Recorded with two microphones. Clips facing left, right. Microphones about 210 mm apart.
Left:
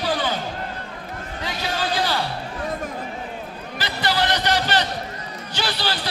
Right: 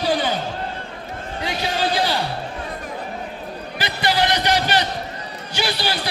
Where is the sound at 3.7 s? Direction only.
15° right (ahead or behind).